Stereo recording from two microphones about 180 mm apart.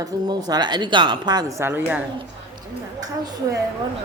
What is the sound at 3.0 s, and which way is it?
Speech, 20° right (ahead or behind).